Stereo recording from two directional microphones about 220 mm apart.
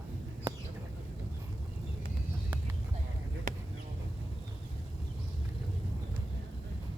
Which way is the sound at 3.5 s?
35° right (ahead or behind).